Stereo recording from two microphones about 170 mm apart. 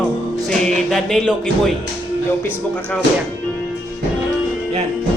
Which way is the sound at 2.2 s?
10° left (ahead or behind).